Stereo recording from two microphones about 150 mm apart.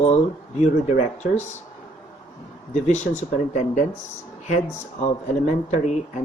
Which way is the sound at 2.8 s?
50° left (ahead or behind).